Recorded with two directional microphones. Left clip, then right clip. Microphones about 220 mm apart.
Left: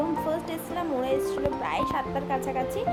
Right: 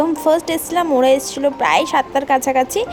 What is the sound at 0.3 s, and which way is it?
A woman's voice, 40° right (ahead or behind).